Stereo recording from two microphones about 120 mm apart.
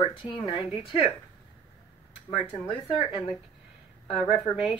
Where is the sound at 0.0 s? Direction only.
45° left (ahead or behind).